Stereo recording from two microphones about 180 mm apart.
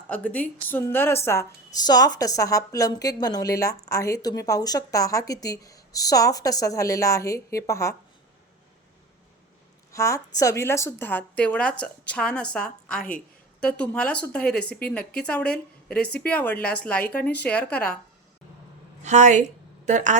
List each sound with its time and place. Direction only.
0.1 s a woman's voice: 10° left (ahead or behind)
9.9 s a woman's voice: 15° left (ahead or behind)
19.0 s a woman's voice: 40° right (ahead or behind)